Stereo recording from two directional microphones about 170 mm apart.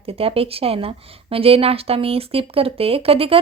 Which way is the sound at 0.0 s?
35° right (ahead or behind).